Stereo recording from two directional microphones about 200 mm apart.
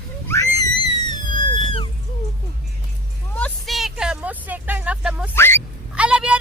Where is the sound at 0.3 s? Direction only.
15° left (ahead or behind).